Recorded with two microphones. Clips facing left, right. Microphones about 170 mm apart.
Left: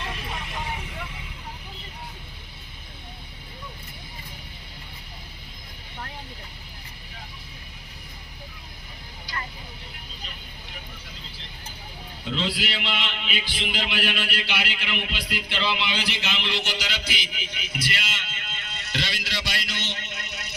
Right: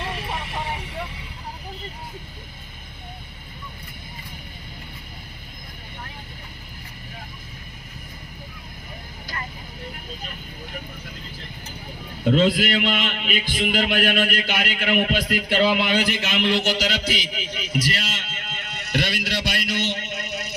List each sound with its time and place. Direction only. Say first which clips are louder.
12.2 s a man's voice: right 10 dB; 50° right (ahead or behind)